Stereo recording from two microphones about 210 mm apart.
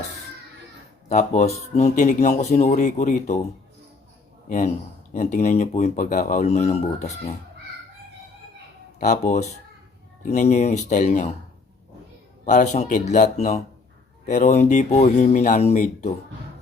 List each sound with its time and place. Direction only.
1.0 s speech: 35° left (ahead or behind)
4.4 s speech: 35° left (ahead or behind)
9.0 s speech: 35° left (ahead or behind)
12.5 s speech: 35° left (ahead or behind)